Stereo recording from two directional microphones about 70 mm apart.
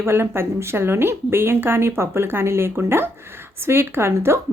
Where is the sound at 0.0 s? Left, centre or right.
Right.